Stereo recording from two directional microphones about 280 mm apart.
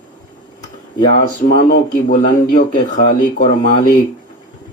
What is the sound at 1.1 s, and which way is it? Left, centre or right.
Speech, left.